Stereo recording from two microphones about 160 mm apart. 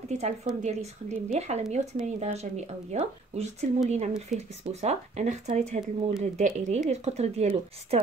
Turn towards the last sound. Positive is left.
turn(degrees=-40)  # may be behind; listen again after turning